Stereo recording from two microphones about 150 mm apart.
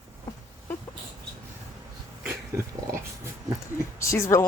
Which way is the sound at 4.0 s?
20° left (ahead or behind).